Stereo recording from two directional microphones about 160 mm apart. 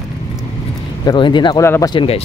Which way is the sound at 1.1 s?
30° left (ahead or behind).